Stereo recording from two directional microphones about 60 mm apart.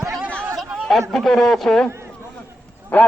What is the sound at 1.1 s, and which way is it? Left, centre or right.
Speech, centre.